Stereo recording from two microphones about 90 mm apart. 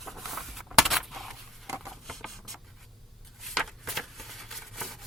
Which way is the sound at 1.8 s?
Centre (ahead or behind).